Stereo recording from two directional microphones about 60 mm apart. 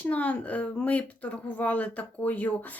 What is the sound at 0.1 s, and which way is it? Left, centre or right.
Speech, left.